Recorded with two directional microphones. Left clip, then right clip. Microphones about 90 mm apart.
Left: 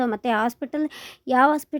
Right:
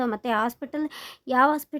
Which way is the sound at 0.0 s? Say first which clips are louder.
Left 2 dB; 30° left (ahead or behind).